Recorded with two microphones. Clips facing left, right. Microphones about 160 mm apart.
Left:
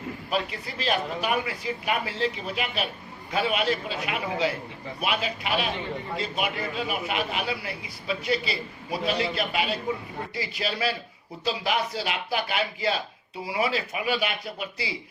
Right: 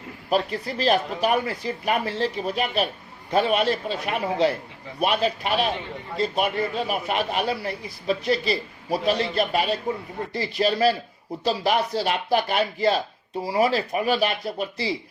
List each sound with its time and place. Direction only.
0.3 s a man's voice: 40° right (ahead or behind)